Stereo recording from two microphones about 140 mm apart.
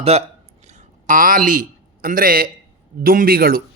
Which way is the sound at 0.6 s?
60° right (ahead or behind).